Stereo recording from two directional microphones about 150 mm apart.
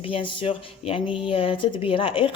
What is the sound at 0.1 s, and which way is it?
Speech, 35° left (ahead or behind).